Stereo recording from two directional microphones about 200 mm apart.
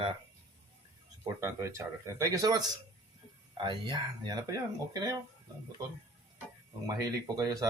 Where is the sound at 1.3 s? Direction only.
15° right (ahead or behind).